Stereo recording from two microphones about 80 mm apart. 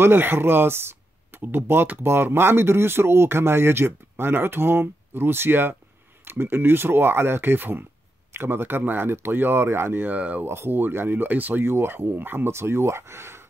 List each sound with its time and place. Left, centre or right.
0.0 s speech: right
10.1 s speech: centre
10.4 s speech: right